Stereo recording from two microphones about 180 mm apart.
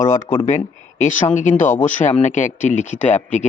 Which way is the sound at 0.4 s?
45° left (ahead or behind).